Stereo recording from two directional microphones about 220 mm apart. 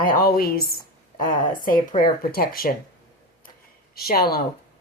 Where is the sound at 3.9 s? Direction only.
45° left (ahead or behind).